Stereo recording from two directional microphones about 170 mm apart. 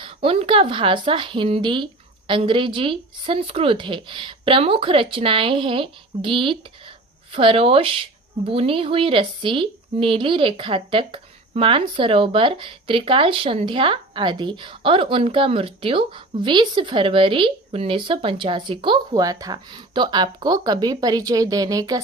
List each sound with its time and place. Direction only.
0.0 s speech: 35° right (ahead or behind)